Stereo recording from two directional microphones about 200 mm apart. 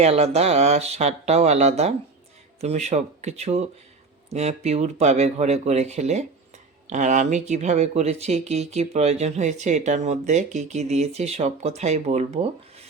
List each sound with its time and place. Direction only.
0.0 s speech: 30° right (ahead or behind)